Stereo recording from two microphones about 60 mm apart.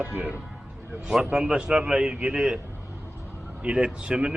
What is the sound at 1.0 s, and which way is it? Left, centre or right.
Speech, centre.